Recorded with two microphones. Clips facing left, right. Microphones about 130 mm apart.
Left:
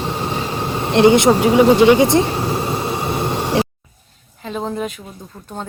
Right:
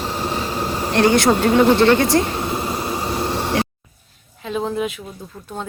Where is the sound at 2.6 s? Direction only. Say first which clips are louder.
Left 2 dB; 25° left (ahead or behind).